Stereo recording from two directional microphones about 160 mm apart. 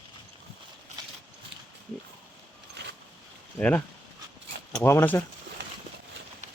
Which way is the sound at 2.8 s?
90° right.